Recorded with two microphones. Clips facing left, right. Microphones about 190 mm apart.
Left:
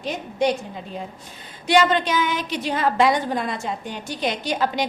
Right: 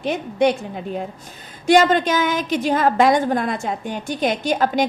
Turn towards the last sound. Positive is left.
turn(degrees=-50)  # may be behind; listen again after turning